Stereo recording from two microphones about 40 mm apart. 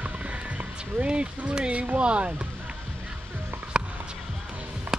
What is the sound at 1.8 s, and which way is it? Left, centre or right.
Speech, right.